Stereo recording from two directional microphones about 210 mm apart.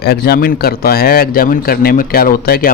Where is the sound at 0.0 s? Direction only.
50° left (ahead or behind).